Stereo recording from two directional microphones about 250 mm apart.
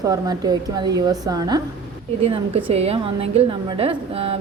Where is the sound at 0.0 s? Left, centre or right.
Centre.